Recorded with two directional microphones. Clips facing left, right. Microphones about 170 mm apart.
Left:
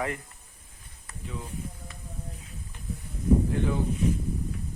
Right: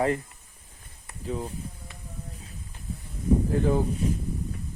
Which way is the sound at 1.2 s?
35° right (ahead or behind).